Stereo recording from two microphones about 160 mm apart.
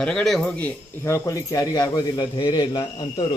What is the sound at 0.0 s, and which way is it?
Speech, 5° left (ahead or behind).